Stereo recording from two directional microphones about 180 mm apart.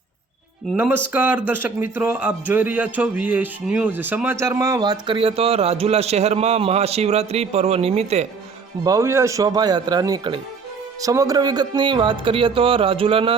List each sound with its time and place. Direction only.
0.7 s speech: 10° right (ahead or behind); by 8.3 s 35° right (ahead or behind)
8.8 s speech: 20° right (ahead or behind)